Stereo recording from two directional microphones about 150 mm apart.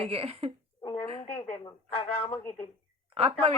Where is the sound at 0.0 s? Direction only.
40° right (ahead or behind).